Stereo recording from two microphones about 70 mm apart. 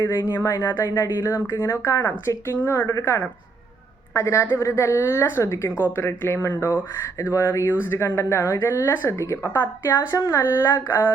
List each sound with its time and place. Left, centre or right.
0.3 s speech: left
10.2 s speech: left
10.4 s speech: left